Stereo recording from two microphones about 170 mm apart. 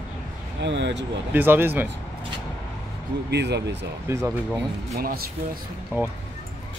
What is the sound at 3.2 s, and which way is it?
Speech, 80° right.